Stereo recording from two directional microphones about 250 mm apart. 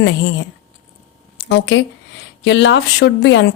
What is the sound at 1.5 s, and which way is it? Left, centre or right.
Speech, left.